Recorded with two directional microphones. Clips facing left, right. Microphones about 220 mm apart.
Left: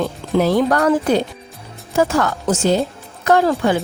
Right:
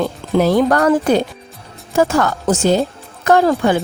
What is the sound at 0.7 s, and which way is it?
Speech, 50° right (ahead or behind).